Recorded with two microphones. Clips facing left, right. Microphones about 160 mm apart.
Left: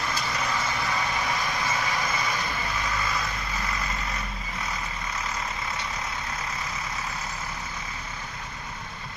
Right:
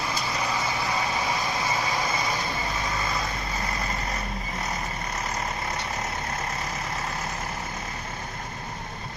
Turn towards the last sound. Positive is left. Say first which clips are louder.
# right 3 dB
turn(degrees=-55)  # may be behind; listen again after turning